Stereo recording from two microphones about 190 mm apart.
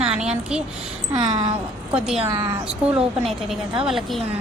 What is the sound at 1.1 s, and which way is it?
Speech, 20° right (ahead or behind).